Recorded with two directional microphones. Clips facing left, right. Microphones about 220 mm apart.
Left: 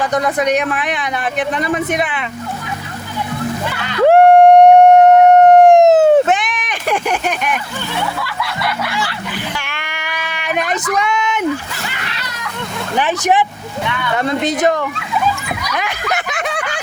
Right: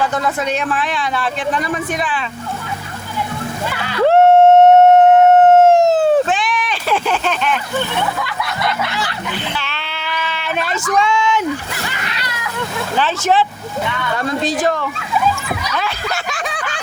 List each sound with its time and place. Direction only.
0.0 s speech: 15° left (ahead or behind)
4.1 s howl: 15° left (ahead or behind)
8.2 s a sound: 20° right (ahead or behind)
9.6 s cat: 15° left (ahead or behind)
13.0 s speech: 15° left (ahead or behind)
15.6 s snicker: 15° left (ahead or behind)